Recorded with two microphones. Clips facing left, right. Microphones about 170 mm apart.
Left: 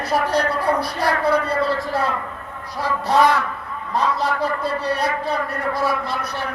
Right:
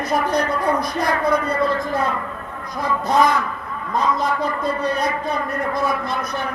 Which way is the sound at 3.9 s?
30° left (ahead or behind).